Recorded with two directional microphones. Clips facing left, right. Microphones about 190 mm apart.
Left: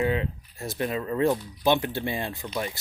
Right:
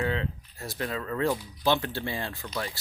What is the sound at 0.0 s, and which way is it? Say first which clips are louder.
Speech: left 4 dB; 15° left (ahead or behind).